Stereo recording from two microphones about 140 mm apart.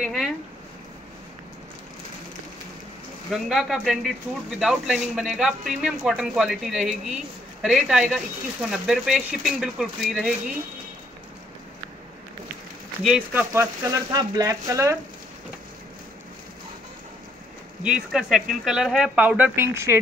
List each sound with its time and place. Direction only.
0.0 s a sound: centre (ahead or behind)
3.3 s speech: centre (ahead or behind)
13.0 s speech: 5° right (ahead or behind)
14.1 s speech: 25° right (ahead or behind)
17.8 s speech: 5° right (ahead or behind)